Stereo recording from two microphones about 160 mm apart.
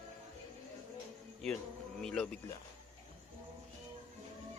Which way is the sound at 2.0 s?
5° left (ahead or behind).